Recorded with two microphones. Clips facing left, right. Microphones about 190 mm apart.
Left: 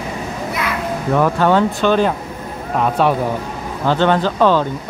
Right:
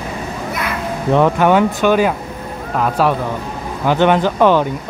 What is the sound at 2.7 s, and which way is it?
Speech, centre (ahead or behind).